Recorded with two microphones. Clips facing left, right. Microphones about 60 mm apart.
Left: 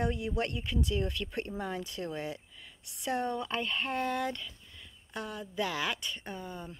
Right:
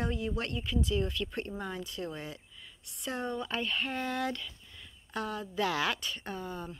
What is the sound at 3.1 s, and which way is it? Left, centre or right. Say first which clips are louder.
Speech: left 2 dB; left.